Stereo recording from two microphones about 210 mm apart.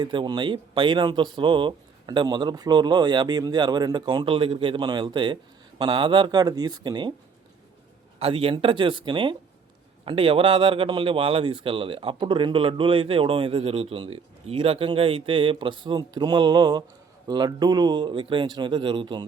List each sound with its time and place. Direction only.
0.0 s speech: 20° right (ahead or behind)
8.2 s speech: 25° right (ahead or behind)